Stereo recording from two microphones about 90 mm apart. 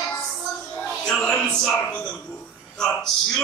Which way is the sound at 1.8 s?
10° left (ahead or behind).